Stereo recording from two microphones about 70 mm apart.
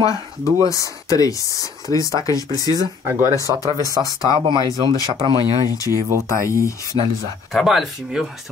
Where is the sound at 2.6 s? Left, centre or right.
Right.